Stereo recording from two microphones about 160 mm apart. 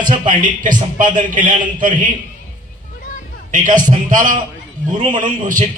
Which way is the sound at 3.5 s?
55° right (ahead or behind).